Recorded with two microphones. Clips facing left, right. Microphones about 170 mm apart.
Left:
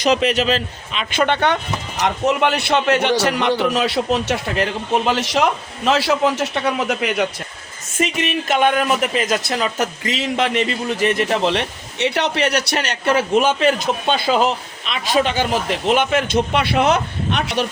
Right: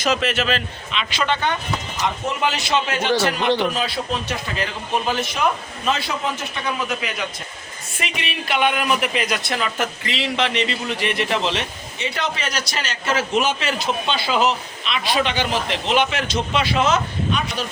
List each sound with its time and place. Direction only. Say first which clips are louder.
0.3 s a man's voice: left 4 dB; 40° left (ahead or behind)
0.9 s a man's voice: left 4 dB; 50° left (ahead or behind)
3.7 s speech: left 6 dB; 75° left (ahead or behind)
7.9 s speech: left 8 dB; 45° left (ahead or behind)
11.9 s a man's voice: left 7 dB; 70° left (ahead or behind)